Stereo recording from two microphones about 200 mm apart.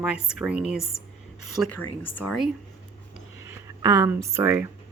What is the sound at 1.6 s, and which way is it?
Speech, 20° right (ahead or behind).